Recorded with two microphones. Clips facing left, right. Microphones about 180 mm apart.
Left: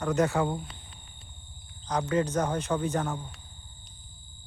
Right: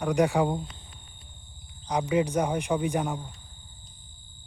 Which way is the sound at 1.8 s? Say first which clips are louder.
Right 2 dB; 10° right (ahead or behind).